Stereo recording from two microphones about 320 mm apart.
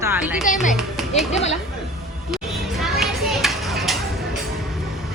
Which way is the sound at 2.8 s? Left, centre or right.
Centre.